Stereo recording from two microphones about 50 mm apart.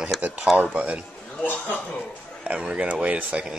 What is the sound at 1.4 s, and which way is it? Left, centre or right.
Speech, left.